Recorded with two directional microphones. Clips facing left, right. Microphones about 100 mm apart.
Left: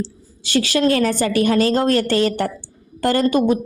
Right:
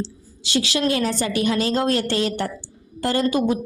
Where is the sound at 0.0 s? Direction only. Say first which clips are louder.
Left 2 dB; 50° left (ahead or behind).